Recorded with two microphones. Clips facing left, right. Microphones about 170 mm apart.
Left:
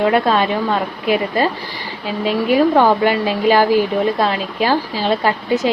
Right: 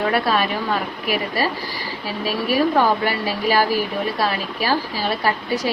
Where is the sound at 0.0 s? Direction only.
20° left (ahead or behind).